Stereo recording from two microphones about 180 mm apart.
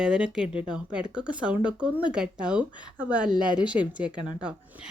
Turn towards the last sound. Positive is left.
turn(degrees=-5)  # may be behind; listen again after turning